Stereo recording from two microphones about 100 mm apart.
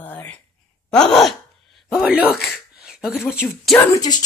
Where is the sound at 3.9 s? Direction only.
40° left (ahead or behind).